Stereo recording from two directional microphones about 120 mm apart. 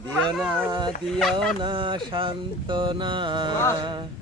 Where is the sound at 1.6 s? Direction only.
45° right (ahead or behind).